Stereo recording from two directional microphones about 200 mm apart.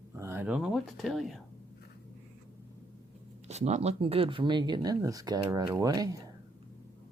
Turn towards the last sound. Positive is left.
turn(degrees=-20)  # may be behind; listen again after turning